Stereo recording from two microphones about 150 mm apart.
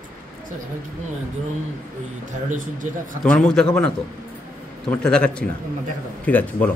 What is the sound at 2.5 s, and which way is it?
Speech, 60° right (ahead or behind).